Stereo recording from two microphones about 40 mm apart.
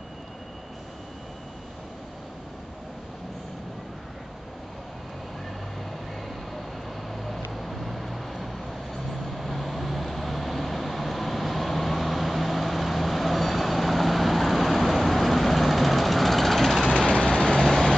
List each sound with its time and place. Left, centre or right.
7.1 s vehicle: centre
17.0 s vehicle: centre